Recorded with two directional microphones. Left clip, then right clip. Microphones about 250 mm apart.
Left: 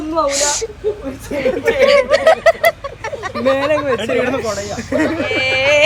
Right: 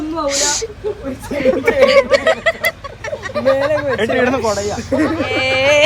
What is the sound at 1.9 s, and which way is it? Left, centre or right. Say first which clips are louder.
Snicker: left 1 dB; centre.